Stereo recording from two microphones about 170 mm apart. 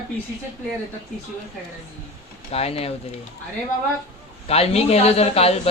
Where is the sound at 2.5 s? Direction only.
35° left (ahead or behind).